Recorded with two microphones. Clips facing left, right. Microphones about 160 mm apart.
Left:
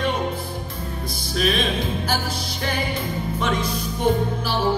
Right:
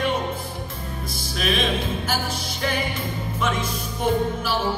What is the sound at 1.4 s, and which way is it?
Music, 40° left (ahead or behind).